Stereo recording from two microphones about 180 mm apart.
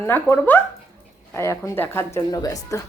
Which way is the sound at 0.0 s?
10° left (ahead or behind).